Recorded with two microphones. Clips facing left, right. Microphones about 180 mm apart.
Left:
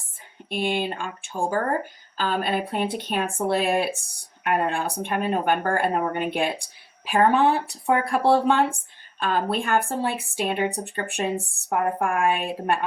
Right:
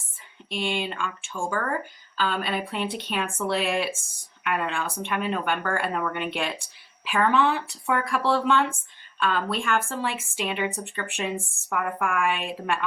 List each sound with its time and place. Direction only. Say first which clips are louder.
0.6 s a woman's voice: left 3 dB; 40° left (ahead or behind)